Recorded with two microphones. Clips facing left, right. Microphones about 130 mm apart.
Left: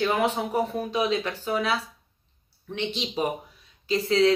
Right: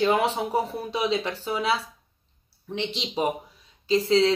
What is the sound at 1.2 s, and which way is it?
Speech, 30° right (ahead or behind).